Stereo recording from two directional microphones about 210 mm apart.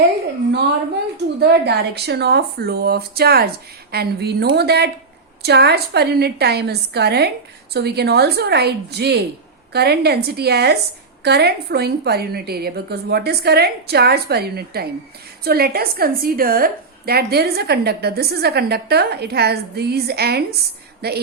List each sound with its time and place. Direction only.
1.4 s a woman's voice: 50° right (ahead or behind)